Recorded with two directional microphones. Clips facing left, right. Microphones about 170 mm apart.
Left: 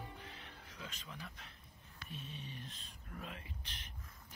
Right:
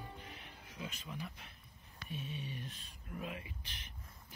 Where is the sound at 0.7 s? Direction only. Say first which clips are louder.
Right 6 dB; 15° right (ahead or behind).